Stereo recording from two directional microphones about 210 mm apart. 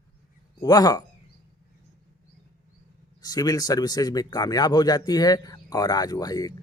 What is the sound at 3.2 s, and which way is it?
Speech, 20° left (ahead or behind).